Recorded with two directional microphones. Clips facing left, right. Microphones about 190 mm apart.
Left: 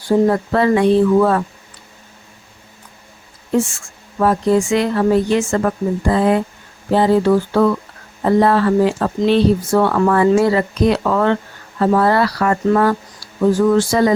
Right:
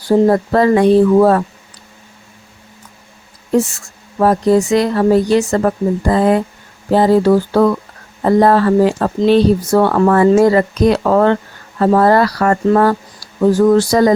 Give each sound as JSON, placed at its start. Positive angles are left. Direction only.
{"t": 0.3, "sound": "speech", "side_deg": -40}
{"t": 3.6, "sound": "speech", "side_deg": -40}